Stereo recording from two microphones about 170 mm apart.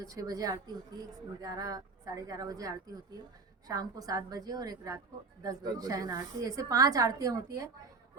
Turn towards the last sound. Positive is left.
turn(degrees=-20)  # may be behind; listen again after turning